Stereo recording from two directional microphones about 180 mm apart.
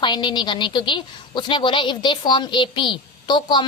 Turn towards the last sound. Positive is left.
turn(degrees=25)  # may be behind; listen again after turning